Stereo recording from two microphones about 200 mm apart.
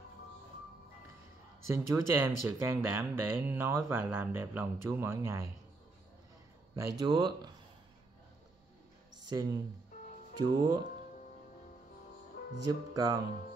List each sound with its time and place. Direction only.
1.7 s speech: 10° right (ahead or behind)
6.7 s speech: 20° right (ahead or behind)
9.3 s speech: 20° right (ahead or behind)
12.6 s speech: 20° right (ahead or behind)